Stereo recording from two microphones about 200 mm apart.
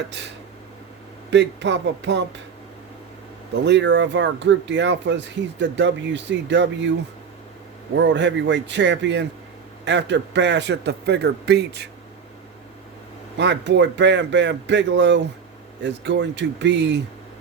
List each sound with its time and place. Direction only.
1.3 s speech: 60° right (ahead or behind)
3.6 s speech: 60° right (ahead or behind)
7.9 s speech: 65° right (ahead or behind)
13.3 s speech: 60° right (ahead or behind)